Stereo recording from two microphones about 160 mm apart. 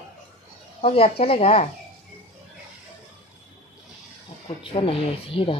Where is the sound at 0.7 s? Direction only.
40° left (ahead or behind).